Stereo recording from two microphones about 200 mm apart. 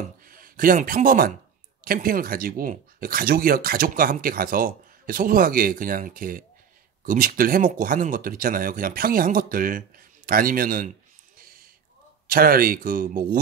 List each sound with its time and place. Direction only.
0.2 s speech: 45° right (ahead or behind)
11.3 s a sound: 45° right (ahead or behind)
12.3 s speech: 45° right (ahead or behind)